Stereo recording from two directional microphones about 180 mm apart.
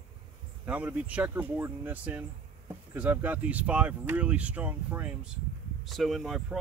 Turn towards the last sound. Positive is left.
turn(degrees=0)  # may be behind; listen again after turning